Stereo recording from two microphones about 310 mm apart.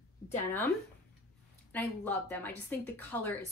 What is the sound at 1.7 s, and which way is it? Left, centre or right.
Speech, centre.